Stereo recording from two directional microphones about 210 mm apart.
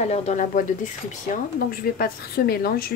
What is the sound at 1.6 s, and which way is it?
Speech, 45° left (ahead or behind).